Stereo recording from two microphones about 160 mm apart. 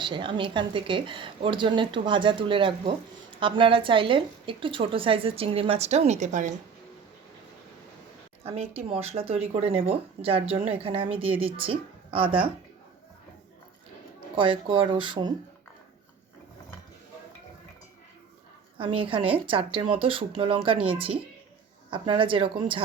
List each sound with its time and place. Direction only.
0.0 s speech: 30° right (ahead or behind); by 6.5 s 50° right (ahead or behind)
8.4 s speech: 40° right (ahead or behind)
14.3 s speech: 30° right (ahead or behind)
18.8 s speech: 35° right (ahead or behind)
21.8 s speech: 30° right (ahead or behind)